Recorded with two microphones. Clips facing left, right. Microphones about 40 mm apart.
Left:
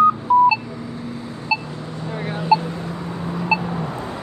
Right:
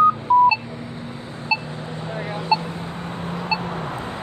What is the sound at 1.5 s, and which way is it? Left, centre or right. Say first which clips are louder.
Telephone dialing: left 1 dB; centre.